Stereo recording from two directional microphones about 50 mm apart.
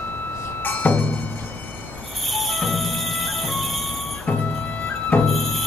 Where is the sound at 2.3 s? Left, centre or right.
Centre.